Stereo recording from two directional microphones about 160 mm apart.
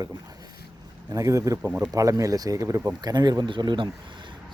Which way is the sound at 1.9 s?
20° right (ahead or behind).